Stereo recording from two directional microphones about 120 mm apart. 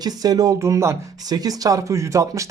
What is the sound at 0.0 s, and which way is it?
Speech, 30° right (ahead or behind).